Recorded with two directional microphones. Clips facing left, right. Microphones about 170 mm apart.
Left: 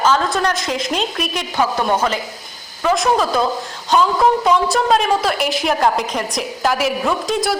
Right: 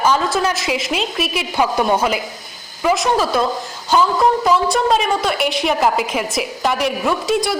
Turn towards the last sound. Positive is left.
turn(degrees=0)  # may be behind; listen again after turning